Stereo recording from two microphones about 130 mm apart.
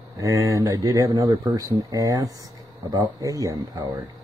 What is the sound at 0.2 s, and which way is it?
Speech, 25° right (ahead or behind).